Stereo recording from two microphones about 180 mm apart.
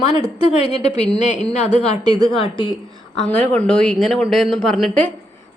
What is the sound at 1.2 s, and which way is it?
Speech, 40° left (ahead or behind).